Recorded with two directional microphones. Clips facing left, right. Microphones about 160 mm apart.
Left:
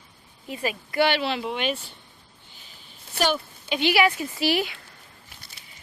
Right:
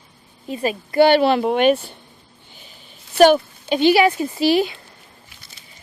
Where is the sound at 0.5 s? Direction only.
35° right (ahead or behind); by 2.0 s 55° right (ahead or behind).